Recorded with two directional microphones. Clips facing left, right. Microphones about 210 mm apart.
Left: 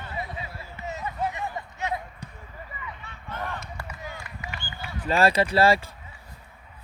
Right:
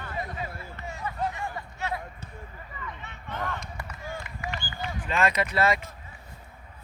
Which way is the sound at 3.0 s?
20° right (ahead or behind).